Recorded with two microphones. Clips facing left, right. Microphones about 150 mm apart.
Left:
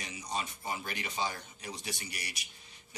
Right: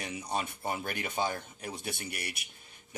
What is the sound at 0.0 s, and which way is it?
Speech, 60° right (ahead or behind).